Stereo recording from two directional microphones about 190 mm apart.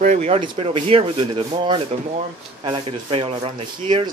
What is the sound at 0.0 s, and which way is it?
Speech, 35° right (ahead or behind).